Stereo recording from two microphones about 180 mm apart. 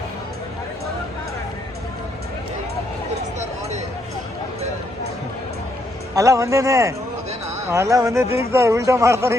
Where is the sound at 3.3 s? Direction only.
40° right (ahead or behind).